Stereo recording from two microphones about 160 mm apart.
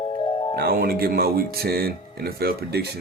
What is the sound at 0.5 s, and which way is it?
Speech, 70° right (ahead or behind).